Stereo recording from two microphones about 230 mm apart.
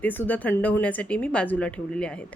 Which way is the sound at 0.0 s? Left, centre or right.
Centre.